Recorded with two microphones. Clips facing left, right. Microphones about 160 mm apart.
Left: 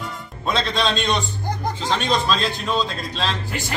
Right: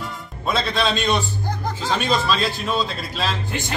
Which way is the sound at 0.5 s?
5° right (ahead or behind).